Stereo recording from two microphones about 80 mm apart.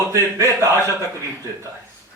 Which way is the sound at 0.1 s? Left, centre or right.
Right.